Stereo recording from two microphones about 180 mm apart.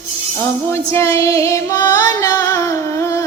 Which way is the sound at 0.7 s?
15° left (ahead or behind).